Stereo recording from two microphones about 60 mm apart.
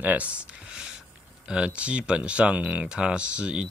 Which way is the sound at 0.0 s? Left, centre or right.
Right.